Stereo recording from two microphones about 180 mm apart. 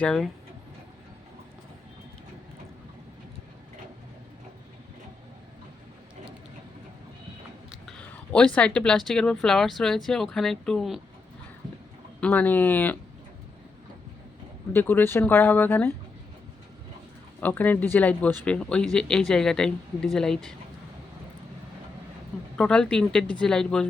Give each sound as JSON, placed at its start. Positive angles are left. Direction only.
{"t": 0.0, "sound": "speech", "side_deg": 5}
{"t": 7.7, "sound": "speech", "side_deg": 5}
{"t": 12.2, "sound": "speech", "side_deg": 10}
{"t": 14.7, "sound": "speech", "side_deg": 10}
{"t": 17.4, "sound": "speech", "side_deg": 10}
{"t": 22.5, "sound": "speech", "side_deg": 5}